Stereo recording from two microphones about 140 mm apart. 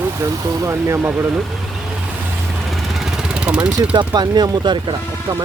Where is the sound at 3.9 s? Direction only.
30° right (ahead or behind).